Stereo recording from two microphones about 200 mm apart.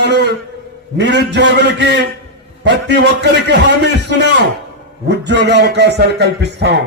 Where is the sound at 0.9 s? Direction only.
60° right (ahead or behind).